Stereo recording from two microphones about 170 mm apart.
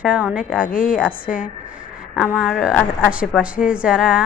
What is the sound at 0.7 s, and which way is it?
Speech, 55° left (ahead or behind).